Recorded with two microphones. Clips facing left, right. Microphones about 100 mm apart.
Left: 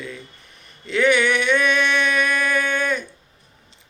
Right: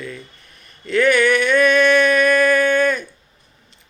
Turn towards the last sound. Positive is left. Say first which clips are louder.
# right 6 dB
turn(degrees=20)  # may be behind; listen again after turning